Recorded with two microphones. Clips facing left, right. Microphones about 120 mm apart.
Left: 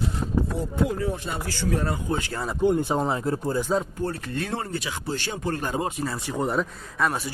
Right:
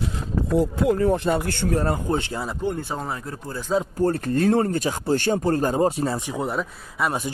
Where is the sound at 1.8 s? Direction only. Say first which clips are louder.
Right 4 dB; 35° right (ahead or behind).